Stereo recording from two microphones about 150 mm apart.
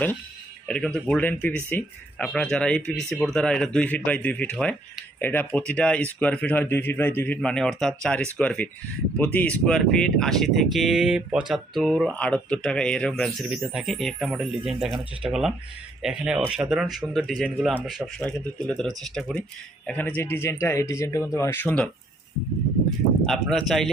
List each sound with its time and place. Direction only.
0.7 s speech: 5° left (ahead or behind)
23.2 s speech: 5° left (ahead or behind)